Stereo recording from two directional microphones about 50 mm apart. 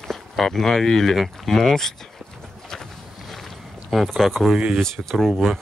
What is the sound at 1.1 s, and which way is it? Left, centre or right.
Speech, centre.